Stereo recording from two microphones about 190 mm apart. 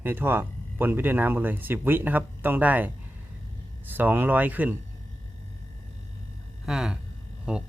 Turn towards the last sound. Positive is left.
turn(degrees=-5)  # may be behind; listen again after turning